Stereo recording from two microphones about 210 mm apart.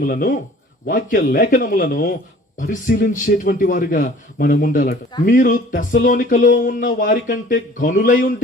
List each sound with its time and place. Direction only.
0.0 s speech: 40° left (ahead or behind)